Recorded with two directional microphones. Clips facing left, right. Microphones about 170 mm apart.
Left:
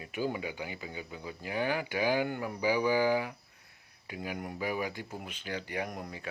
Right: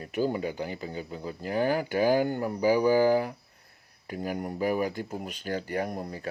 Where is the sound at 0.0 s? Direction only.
40° right (ahead or behind).